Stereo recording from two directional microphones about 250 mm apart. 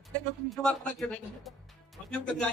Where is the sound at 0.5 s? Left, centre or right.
Centre.